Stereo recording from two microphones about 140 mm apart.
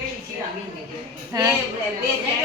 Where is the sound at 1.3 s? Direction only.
20° right (ahead or behind).